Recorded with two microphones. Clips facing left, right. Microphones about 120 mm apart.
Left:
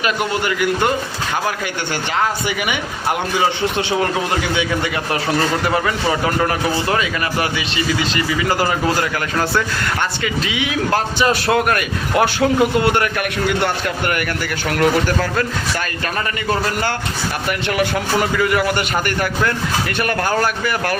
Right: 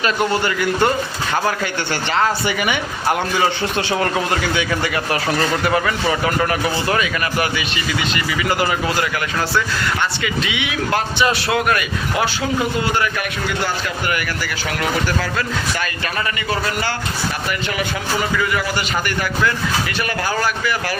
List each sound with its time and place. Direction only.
0.0 s a man's voice: 15° left (ahead or behind)
3.8 s a man's voice: 20° left (ahead or behind)
5.6 s a man's voice: 25° left (ahead or behind)
10.2 s a man's voice: 35° left (ahead or behind); by 13.1 s 60° left (ahead or behind)
14.8 s a man's voice: 50° left (ahead or behind)
17.7 s a man's voice: 60° left (ahead or behind)
19.0 s a man's voice: 50° left (ahead or behind)